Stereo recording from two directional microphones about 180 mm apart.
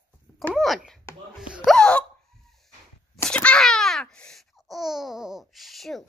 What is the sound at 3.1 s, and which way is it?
Babbling, 5° left (ahead or behind).